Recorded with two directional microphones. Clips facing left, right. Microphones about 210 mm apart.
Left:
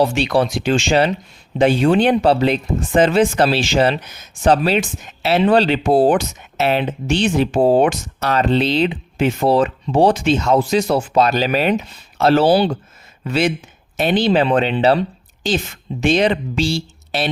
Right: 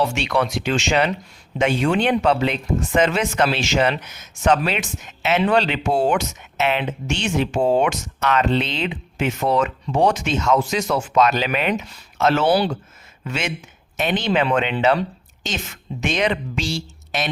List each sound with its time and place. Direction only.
0.0 s speech: 35° left (ahead or behind)
12.5 s speech: 25° left (ahead or behind)
13.2 s speech: 35° left (ahead or behind)